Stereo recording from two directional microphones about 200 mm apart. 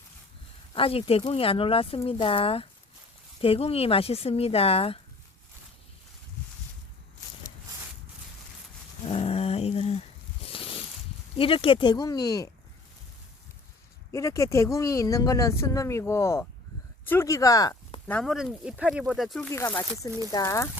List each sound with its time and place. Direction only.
0.7 s speech: 25° left (ahead or behind)
9.0 s a sound: 30° left (ahead or behind)
11.3 s speech: 25° left (ahead or behind)
14.1 s speech: 15° left (ahead or behind)
18.1 s speech: centre (ahead or behind)
19.5 s speech: 15° left (ahead or behind)